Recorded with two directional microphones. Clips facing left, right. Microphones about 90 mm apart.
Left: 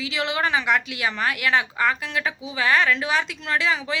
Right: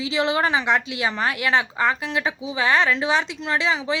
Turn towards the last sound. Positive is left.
turn(degrees=-25)  # may be behind; listen again after turning